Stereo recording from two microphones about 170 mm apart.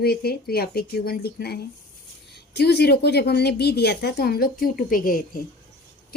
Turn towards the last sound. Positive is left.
turn(degrees=55)  # may be behind; listen again after turning